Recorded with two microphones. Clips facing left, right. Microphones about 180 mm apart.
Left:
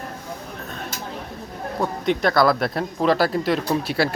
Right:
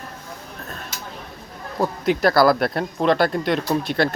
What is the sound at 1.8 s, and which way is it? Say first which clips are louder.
A man's voice: right 2 dB; 5° right (ahead or behind).